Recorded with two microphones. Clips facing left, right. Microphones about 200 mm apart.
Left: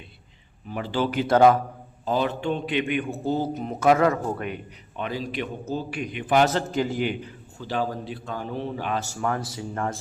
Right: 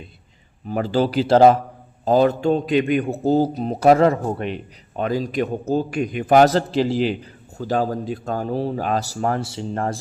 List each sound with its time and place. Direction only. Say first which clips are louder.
0.7 s a man's voice: right 6 dB; 40° right (ahead or behind)
2.0 s a man's voice: right 8 dB; 40° right (ahead or behind)
4.9 s a man's voice: right 8 dB; 40° right (ahead or behind)